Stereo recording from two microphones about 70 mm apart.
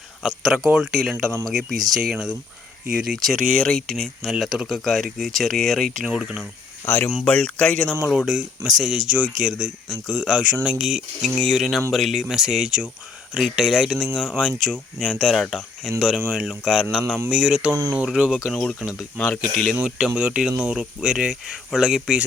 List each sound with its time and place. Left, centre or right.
0.2 s speech: centre
3.2 s speech: centre
6.8 s speech: left
7.3 s speech: centre
8.1 s speech: centre
18.6 s speech: centre
18.9 s speech: centre
20.1 s speech: centre